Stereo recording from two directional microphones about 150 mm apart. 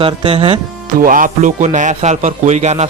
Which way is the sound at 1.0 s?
65° right (ahead or behind).